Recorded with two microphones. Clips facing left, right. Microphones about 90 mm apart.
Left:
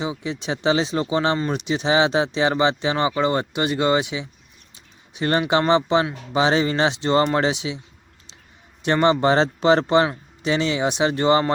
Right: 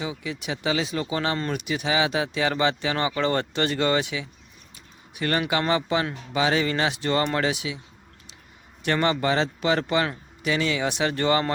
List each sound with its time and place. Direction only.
0.0 s speech: 25° left (ahead or behind)
8.8 s speech: 20° left (ahead or behind)